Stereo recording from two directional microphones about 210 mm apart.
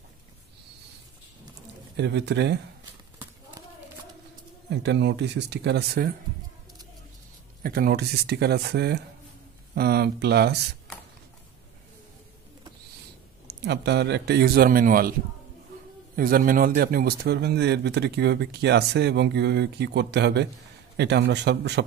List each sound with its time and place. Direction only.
2.0 s a man's voice: 55° right (ahead or behind)
4.6 s speech: 55° right (ahead or behind)
7.6 s a man's voice: 45° right (ahead or behind)
13.5 s a man's voice: 55° right (ahead or behind)
16.2 s a man's voice: 45° right (ahead or behind)